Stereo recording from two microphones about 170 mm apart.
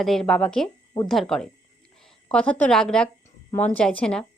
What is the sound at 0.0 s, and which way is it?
A woman's voice, 5° left (ahead or behind).